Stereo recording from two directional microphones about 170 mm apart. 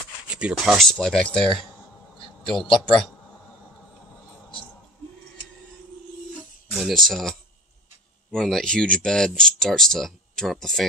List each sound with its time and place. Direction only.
0.3 s speech: 5° right (ahead or behind)
2.7 s speech: centre (ahead or behind)
6.7 s speech: centre (ahead or behind)